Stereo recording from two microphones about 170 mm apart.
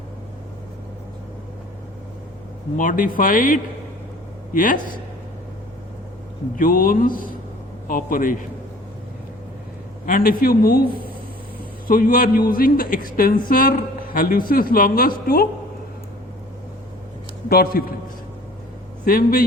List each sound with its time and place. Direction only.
2.7 s a man's voice: 50° left (ahead or behind)
6.6 s a man's voice: 55° left (ahead or behind)
10.1 s a man's voice: 55° left (ahead or behind)
11.9 s a man's voice: 55° left (ahead or behind)
17.5 s a man's voice: 65° left (ahead or behind)
19.0 s a man's voice: 55° left (ahead or behind)